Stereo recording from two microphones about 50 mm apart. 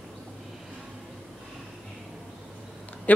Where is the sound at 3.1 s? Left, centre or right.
Left.